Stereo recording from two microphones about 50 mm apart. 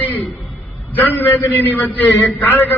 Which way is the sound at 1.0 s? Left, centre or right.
Left.